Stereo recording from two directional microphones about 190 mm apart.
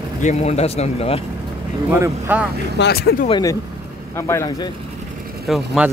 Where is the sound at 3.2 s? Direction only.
20° left (ahead or behind).